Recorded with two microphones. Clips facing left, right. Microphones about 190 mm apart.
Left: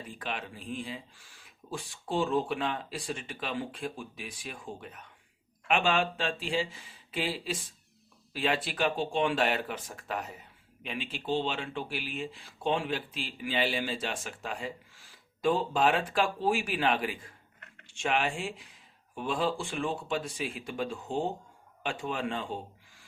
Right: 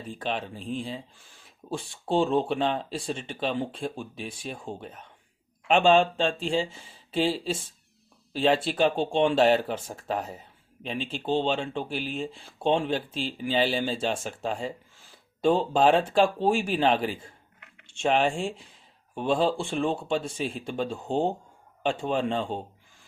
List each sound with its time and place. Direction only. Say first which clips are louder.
0.1 s speech: right 8 dB; 30° right (ahead or behind)